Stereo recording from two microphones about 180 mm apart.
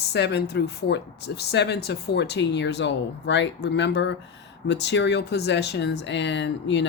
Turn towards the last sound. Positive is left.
turn(degrees=80)